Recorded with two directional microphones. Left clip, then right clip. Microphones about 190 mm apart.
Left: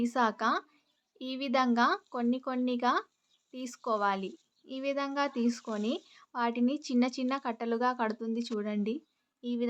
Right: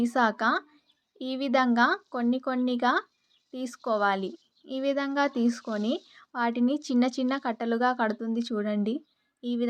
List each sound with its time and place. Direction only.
0.0 s speech: 15° right (ahead or behind)